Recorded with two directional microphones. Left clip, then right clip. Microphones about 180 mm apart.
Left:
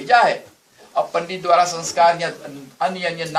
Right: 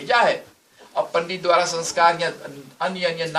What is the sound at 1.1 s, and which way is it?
Speech, 5° right (ahead or behind).